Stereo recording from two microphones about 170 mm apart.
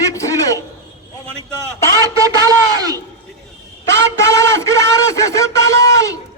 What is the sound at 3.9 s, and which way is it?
A man's voice, 20° left (ahead or behind).